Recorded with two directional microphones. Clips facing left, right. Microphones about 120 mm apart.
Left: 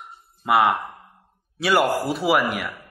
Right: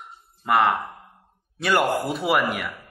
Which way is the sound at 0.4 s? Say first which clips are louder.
Left 1 dB; 5° left (ahead or behind).